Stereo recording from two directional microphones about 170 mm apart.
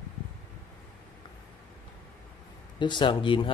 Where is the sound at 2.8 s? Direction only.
25° left (ahead or behind).